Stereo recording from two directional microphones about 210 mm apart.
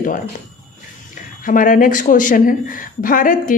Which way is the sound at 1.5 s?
40° left (ahead or behind).